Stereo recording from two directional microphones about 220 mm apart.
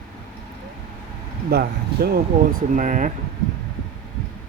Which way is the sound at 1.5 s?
45° right (ahead or behind).